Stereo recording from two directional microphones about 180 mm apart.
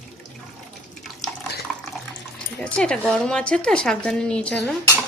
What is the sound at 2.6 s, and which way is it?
A woman's voice, 5° left (ahead or behind).